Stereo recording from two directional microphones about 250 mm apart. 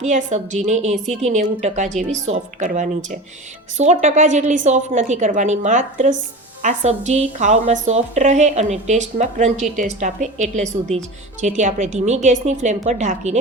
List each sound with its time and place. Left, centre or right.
0.0 s speech: right